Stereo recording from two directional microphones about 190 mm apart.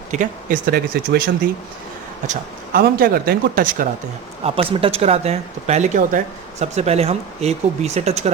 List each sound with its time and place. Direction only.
0.1 s speech: 45° right (ahead or behind)
2.7 s speech: 50° right (ahead or behind)
4.4 s speech: 30° right (ahead or behind)